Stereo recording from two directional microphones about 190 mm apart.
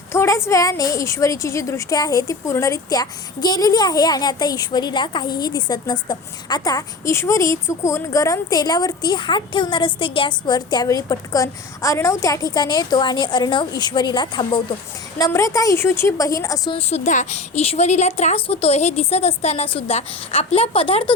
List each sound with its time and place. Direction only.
0.1 s a woman's voice: 15° left (ahead or behind)
16.7 s a woman's voice: 40° left (ahead or behind)